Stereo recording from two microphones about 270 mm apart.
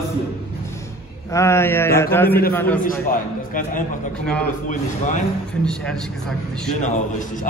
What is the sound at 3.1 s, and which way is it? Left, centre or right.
Speech, left.